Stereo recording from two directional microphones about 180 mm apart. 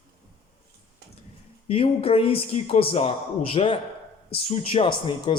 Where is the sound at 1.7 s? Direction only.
30° left (ahead or behind).